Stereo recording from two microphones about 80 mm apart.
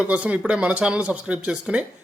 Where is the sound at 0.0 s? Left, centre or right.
Centre.